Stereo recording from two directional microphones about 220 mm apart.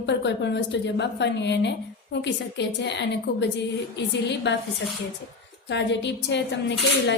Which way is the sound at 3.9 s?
50° left (ahead or behind).